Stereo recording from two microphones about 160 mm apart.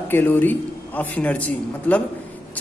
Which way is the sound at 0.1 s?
10° left (ahead or behind).